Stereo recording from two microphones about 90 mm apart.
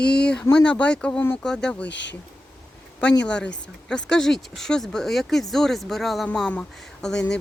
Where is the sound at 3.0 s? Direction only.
10° left (ahead or behind).